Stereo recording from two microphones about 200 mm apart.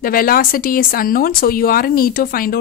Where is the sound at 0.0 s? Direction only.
45° left (ahead or behind).